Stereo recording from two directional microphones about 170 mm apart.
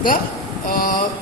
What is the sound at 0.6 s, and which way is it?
Speech, 60° left (ahead or behind).